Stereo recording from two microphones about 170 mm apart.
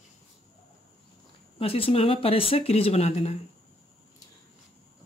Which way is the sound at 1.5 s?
35° left (ahead or behind).